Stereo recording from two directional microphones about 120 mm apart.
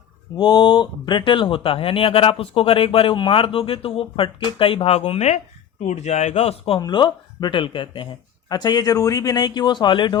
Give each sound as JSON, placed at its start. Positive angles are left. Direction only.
{"t": 0.3, "sound": "speech", "side_deg": 35}
{"t": 5.8, "sound": "a man's voice", "side_deg": 70}
{"t": 6.7, "sound": "speech", "side_deg": 40}